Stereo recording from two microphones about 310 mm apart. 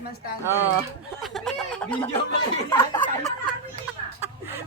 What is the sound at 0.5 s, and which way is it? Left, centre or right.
Speech, centre.